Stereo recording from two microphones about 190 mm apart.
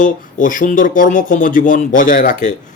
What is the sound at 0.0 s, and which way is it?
Speech, 45° left (ahead or behind).